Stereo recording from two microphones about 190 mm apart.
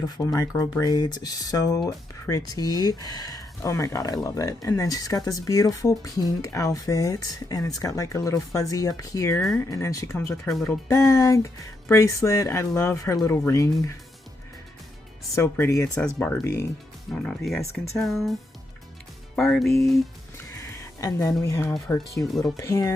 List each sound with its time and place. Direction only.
0.3 s speech: 15° left (ahead or behind)
9.4 s speech: 5° left (ahead or behind)
9.6 s speech: 15° left (ahead or behind)
15.4 s speech: 15° left (ahead or behind)
17.1 s speech: centre (ahead or behind)
19.4 s speech: centre (ahead or behind)
20.5 s a sound: 15° left (ahead or behind)
21.4 s speech: 15° left (ahead or behind)